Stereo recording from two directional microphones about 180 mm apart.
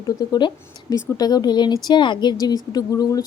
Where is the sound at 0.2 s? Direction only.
25° left (ahead or behind).